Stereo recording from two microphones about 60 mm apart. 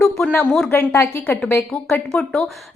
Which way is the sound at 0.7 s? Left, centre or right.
Left.